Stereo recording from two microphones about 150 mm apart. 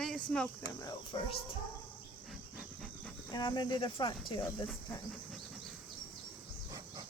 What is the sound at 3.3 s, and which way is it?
Cricket, 30° left (ahead or behind).